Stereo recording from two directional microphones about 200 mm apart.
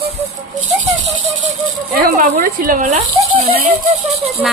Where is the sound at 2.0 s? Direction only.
45° right (ahead or behind).